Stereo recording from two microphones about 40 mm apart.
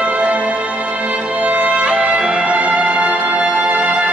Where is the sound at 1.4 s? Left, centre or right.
Right.